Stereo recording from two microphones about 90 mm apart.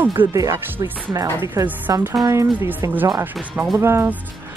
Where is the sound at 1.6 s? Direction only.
35° right (ahead or behind).